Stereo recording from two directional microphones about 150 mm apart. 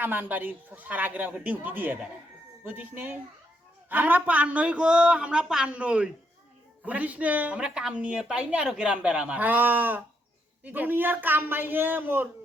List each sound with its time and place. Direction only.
0.0 s a woman's voice: 10° right (ahead or behind)